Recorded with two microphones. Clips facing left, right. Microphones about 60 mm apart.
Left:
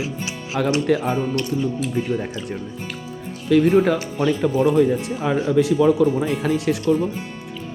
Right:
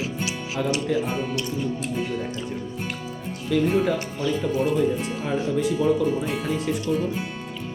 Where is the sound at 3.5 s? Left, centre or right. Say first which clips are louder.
Left 6 dB; left.